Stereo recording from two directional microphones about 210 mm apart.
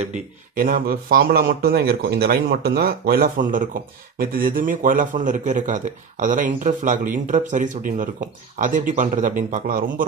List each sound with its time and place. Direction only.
0.6 s a man's voice: 40° right (ahead or behind)